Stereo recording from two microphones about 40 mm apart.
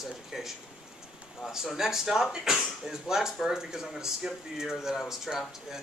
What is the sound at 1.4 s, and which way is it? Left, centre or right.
Speech, centre.